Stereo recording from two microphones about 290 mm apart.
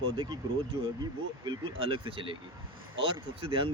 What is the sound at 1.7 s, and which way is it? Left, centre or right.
Speech, centre.